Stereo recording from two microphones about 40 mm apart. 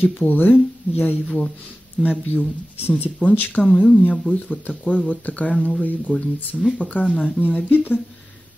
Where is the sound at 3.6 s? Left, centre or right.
Left.